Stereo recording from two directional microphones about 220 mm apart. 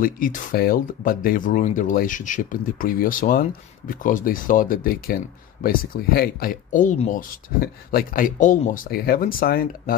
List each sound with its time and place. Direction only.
0.0 s speech: 40° left (ahead or behind)